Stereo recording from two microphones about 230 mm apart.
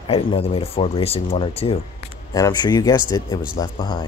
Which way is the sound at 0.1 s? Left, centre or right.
Left.